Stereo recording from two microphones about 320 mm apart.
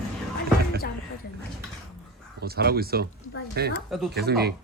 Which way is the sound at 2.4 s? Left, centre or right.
Right.